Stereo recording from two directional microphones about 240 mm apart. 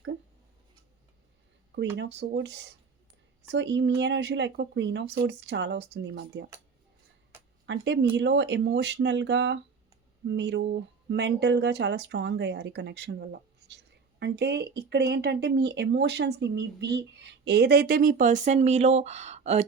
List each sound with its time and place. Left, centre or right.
2.0 s speech: right
7.7 s speech: right